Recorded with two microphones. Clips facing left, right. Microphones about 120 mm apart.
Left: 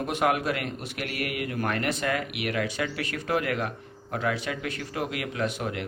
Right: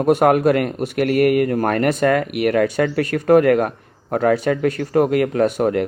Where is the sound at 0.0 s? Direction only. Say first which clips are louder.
Right 11 dB; 45° right (ahead or behind).